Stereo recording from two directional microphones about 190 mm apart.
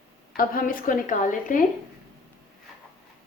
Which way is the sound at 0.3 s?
50° left (ahead or behind).